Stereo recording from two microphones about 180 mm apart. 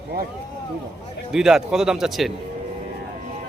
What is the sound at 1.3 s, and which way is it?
Speech, centre (ahead or behind).